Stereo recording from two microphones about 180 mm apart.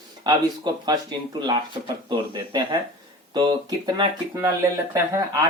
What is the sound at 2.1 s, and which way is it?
Speech, 25° right (ahead or behind).